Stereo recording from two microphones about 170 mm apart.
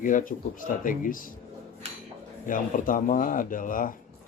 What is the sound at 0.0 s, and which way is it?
Speech, 50° left (ahead or behind).